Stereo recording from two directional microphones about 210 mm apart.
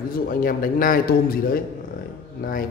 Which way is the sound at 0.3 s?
40° left (ahead or behind).